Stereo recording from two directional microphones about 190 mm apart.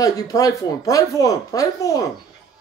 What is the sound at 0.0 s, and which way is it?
Speech, 20° left (ahead or behind).